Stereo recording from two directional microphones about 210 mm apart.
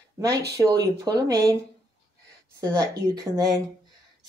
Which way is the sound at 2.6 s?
20° right (ahead or behind).